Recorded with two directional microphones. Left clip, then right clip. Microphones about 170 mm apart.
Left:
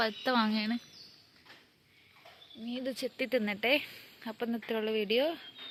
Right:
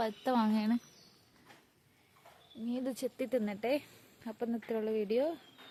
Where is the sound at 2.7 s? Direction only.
30° right (ahead or behind).